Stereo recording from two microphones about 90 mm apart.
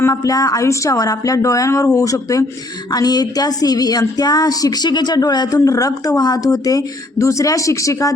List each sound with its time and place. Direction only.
0.0 s speech: 40° left (ahead or behind)
2.9 s music: 45° left (ahead or behind)
5.5 s speech: 35° left (ahead or behind)